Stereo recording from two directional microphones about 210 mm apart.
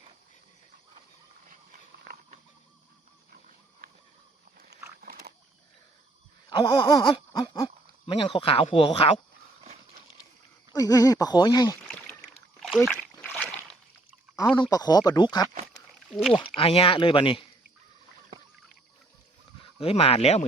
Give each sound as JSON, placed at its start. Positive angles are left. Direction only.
{"t": 4.9, "sound": "a sound", "side_deg": -45}
{"t": 6.5, "sound": "a sound", "side_deg": 20}
{"t": 8.0, "sound": "speech", "side_deg": 25}
{"t": 10.7, "sound": "speech", "side_deg": 15}
{"t": 11.9, "sound": "splash", "side_deg": 0}
{"t": 14.5, "sound": "speech", "side_deg": 20}
{"t": 16.6, "sound": "speech", "side_deg": 25}
{"t": 19.6, "sound": "speech", "side_deg": 30}